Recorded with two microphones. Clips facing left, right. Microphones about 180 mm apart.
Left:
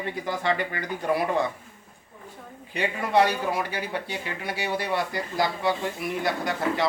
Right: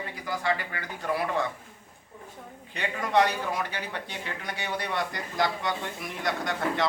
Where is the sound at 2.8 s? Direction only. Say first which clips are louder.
Left 2 dB; 10° left (ahead or behind).